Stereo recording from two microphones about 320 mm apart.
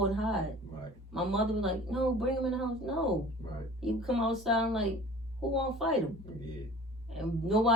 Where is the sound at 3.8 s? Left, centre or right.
Centre.